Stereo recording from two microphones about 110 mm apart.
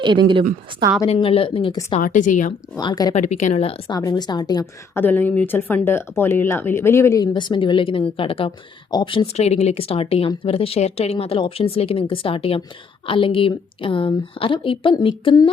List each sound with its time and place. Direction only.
0.0 s a woman's voice: 45° right (ahead or behind)
1.0 s speech: 65° left (ahead or behind)
2.1 s speech: 90° left
2.7 s a woman's voice: 35° left (ahead or behind)
3.2 s speech: 90° left
3.8 s a woman's voice: 35° left (ahead or behind)
4.9 s speech: 15° left (ahead or behind)
7.3 s speech: 45° left (ahead or behind)
9.2 s speech: 80° left; by 15.4 s 50° left (ahead or behind)